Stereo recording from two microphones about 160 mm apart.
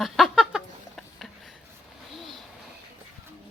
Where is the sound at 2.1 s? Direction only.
Centre (ahead or behind).